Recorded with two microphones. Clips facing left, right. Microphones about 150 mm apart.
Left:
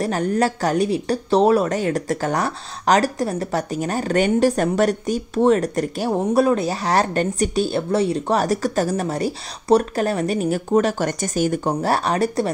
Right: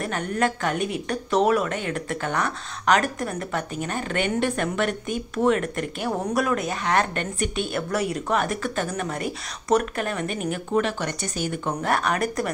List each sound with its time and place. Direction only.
0.0 s speech: 35° left (ahead or behind)